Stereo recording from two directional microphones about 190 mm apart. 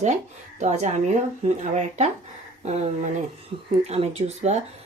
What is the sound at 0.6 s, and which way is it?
Speech, 40° right (ahead or behind).